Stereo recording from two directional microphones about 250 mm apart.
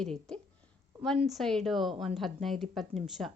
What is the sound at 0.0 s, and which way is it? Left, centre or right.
A woman's voice, centre.